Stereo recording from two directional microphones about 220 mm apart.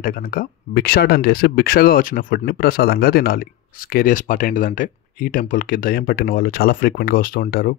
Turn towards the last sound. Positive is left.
turn(degrees=40)  # may be behind; listen again after turning